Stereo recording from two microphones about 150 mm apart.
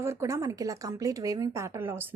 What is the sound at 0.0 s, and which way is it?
A woman's voice, 20° right (ahead or behind).